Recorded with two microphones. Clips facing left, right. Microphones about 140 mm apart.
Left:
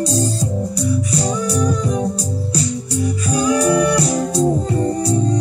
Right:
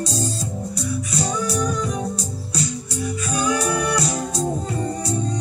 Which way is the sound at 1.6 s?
35° left (ahead or behind).